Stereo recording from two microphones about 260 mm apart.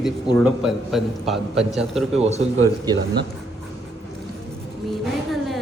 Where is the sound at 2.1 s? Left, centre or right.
Right.